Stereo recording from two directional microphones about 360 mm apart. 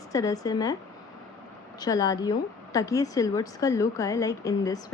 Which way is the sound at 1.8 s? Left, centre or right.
Centre.